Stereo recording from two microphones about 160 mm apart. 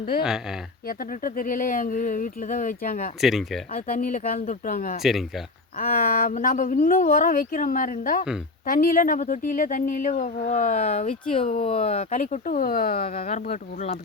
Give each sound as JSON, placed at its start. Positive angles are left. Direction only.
{"t": 0.9, "sound": "speech", "side_deg": 60}
{"t": 3.2, "sound": "speech", "side_deg": 0}
{"t": 3.7, "sound": "speech", "side_deg": 60}
{"t": 5.0, "sound": "speech", "side_deg": 0}
{"t": 5.7, "sound": "speech", "side_deg": 65}